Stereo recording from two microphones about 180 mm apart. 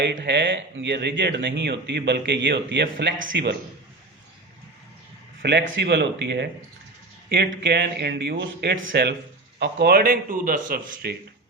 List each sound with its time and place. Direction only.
0.0 s speech: 75° right (ahead or behind)
3.3 s speech: 70° right (ahead or behind)
5.4 s speech: 75° right (ahead or behind)
9.6 s a man's voice: 70° right (ahead or behind)